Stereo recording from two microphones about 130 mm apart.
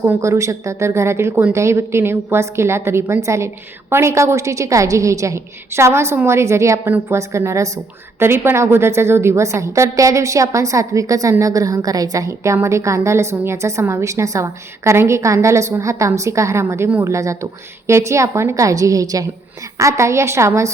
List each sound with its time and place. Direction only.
0.0 s a woman's voice: 20° right (ahead or behind)